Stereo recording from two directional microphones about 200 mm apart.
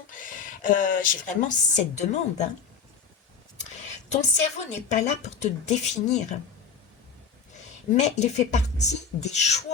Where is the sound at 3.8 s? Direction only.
35° left (ahead or behind).